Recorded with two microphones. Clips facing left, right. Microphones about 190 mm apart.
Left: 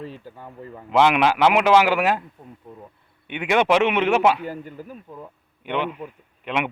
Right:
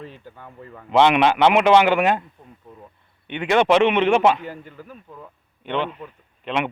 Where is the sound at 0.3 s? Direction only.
10° left (ahead or behind).